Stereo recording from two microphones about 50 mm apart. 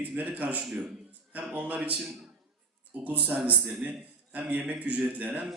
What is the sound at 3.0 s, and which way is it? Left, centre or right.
Speech, right.